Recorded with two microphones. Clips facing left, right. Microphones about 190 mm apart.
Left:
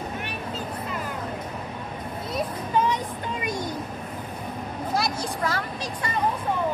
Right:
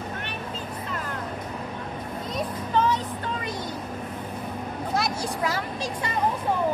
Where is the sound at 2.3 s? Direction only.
10° left (ahead or behind).